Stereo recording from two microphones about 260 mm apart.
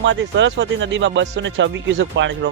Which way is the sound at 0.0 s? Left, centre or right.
Right.